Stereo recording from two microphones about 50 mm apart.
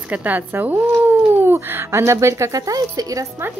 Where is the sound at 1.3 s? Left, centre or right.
Right.